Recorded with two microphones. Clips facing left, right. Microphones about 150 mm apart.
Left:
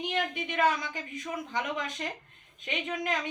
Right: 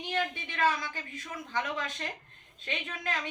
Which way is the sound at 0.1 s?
20° left (ahead or behind).